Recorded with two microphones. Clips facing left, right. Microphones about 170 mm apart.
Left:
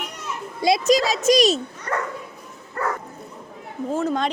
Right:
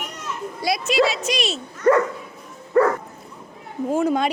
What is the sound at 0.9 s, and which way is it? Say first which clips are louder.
Speech: left 1 dB; 40° left (ahead or behind).